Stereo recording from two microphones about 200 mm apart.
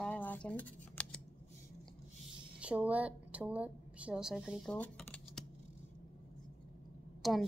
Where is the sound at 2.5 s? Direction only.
5° right (ahead or behind).